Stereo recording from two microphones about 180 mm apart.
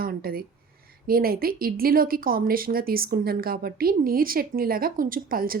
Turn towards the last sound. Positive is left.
turn(degrees=-55)  # may be behind; listen again after turning